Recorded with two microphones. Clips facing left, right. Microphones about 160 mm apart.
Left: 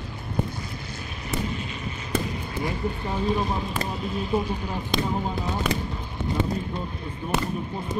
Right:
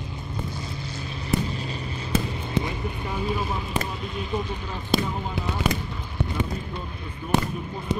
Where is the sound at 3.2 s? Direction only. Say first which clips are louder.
Left 3 dB; 40° left (ahead or behind).